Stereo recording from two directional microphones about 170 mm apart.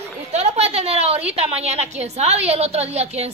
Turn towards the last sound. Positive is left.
turn(degrees=-40)  # may be behind; listen again after turning